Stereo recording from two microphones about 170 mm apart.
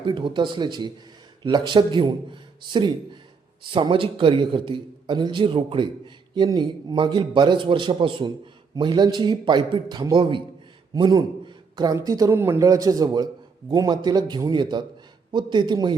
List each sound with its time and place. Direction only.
0.0 s a man's voice: 30° right (ahead or behind)